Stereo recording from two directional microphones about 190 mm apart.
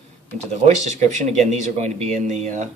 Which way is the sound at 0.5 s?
35° right (ahead or behind).